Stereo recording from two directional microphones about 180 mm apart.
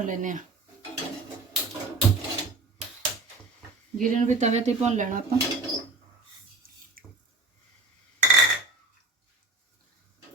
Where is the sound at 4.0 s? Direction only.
40° right (ahead or behind).